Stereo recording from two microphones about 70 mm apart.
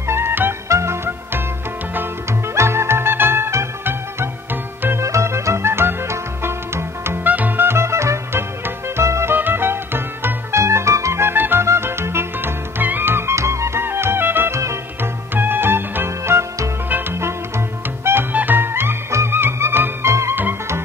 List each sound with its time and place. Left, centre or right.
0.0 s music: right
0.7 s music: right
7.2 s music: right
9.3 s music: right
18.3 s music: right